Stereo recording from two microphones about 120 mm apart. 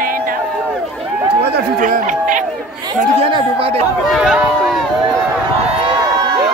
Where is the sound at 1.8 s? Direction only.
90° right.